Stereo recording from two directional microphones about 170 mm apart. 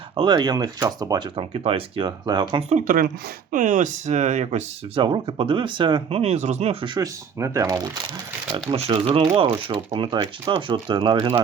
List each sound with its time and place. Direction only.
0.2 s speech: 25° right (ahead or behind)
2.6 s speech: 50° right (ahead or behind)
5.0 s speech: 30° right (ahead or behind)
8.7 s speech: 30° right (ahead or behind)